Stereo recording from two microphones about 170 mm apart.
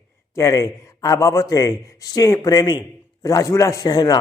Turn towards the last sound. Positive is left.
turn(degrees=20)  # may be behind; listen again after turning